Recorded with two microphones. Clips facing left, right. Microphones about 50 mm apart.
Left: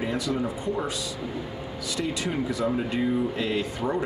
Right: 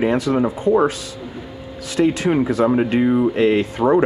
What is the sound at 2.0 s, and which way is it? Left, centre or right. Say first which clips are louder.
Speech: right 12 dB; right.